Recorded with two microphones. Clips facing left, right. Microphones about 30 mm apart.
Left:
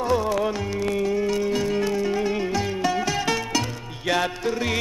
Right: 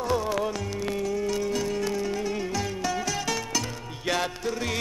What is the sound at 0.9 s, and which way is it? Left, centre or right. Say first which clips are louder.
Music: left 4 dB; left.